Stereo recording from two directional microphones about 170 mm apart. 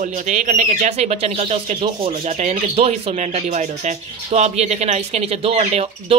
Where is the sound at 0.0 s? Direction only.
45° right (ahead or behind).